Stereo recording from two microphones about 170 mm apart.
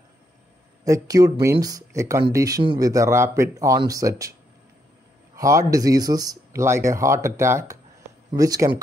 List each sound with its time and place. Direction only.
0.8 s speech: 20° right (ahead or behind)
5.3 s speech: 20° right (ahead or behind)